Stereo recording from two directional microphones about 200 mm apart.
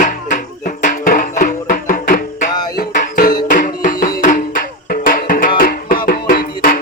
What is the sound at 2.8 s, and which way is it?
Music, 45° left (ahead or behind).